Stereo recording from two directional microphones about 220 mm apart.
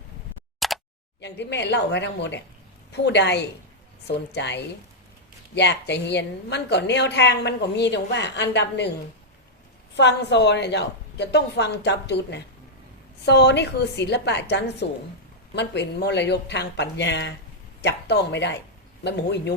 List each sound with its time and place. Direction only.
0.6 s a sound: centre (ahead or behind)
1.2 s a woman's voice: 50° left (ahead or behind)
9.9 s a woman's voice: 50° left (ahead or behind)